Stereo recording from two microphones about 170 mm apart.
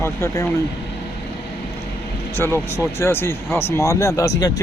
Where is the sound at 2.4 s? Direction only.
15° left (ahead or behind).